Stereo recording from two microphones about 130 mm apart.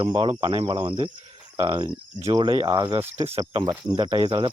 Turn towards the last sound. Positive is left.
turn(degrees=-40)  # may be behind; listen again after turning